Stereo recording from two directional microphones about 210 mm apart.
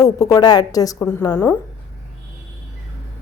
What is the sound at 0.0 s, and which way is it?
A woman's voice, 15° left (ahead or behind).